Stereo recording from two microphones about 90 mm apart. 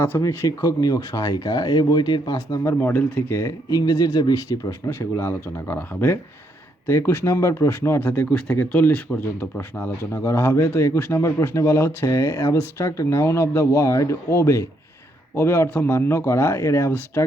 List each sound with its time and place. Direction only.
0.2 s speech: 40° left (ahead or behind)
2.6 s speech: 25° left (ahead or behind)
3.7 s speech: 45° left (ahead or behind)
4.9 s speech: 25° left (ahead or behind)